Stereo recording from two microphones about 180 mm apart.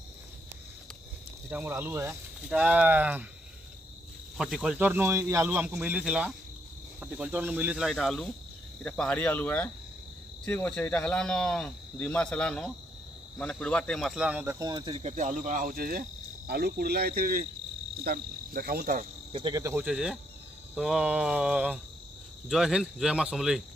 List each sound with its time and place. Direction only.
1.5 s speech: 10° right (ahead or behind)
4.4 s speech: centre (ahead or behind)
14.6 s speech: 25° right (ahead or behind); by 19.0 s 50° right (ahead or behind)
19.3 s cricket: 25° right (ahead or behind)
19.6 s speech: 10° right (ahead or behind)